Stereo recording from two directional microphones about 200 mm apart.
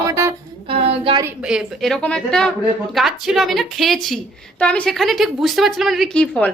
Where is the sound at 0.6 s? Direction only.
30° right (ahead or behind).